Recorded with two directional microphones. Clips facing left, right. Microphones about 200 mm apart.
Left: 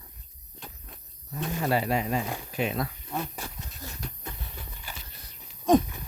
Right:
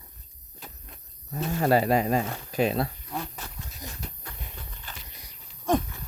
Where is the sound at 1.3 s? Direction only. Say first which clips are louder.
Right 4 dB; 45° right (ahead or behind).